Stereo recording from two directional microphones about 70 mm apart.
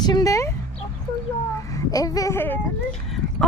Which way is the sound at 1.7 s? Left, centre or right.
Left.